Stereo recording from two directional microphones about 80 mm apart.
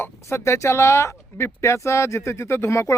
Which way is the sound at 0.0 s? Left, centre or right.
Left.